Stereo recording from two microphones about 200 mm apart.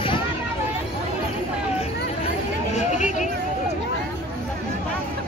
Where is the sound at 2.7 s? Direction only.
35° left (ahead or behind).